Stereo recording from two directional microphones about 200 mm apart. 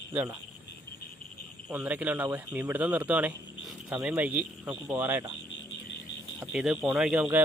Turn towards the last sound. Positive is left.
turn(degrees=-10)  # may be behind; listen again after turning